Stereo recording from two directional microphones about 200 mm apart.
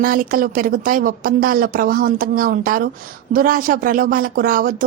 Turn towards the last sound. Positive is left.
turn(degrees=-45)  # may be behind; listen again after turning